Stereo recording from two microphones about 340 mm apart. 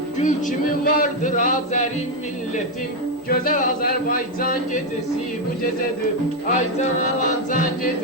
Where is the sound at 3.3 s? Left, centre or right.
Left.